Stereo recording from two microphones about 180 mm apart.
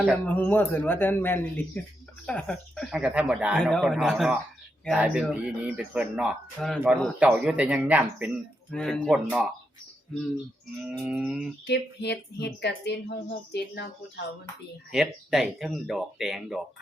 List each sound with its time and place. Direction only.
0.3 s speech: 10° left (ahead or behind); by 8.3 s 10° right (ahead or behind)
8.7 s speech: 5° left (ahead or behind)
10.8 s speech: 5° right (ahead or behind)
11.6 s speech: 70° left (ahead or behind)
14.9 s speech: centre (ahead or behind)